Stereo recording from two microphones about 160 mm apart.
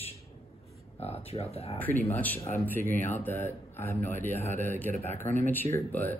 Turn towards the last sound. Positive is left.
turn(degrees=10)  # may be behind; listen again after turning